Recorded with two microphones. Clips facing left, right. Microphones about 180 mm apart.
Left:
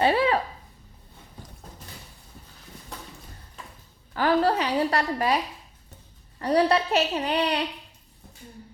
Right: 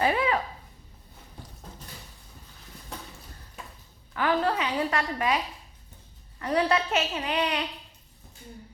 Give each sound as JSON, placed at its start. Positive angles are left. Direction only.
{"t": 0.0, "sound": "a sound", "side_deg": 30}
{"t": 4.1, "sound": "a woman's voice", "side_deg": 35}
{"t": 6.4, "sound": "a woman's voice", "side_deg": 35}